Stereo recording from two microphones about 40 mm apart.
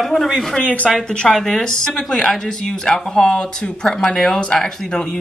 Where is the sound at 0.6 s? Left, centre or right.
Left.